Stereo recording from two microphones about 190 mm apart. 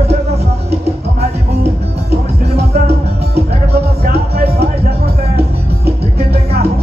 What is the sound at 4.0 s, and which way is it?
Music, 55° right (ahead or behind).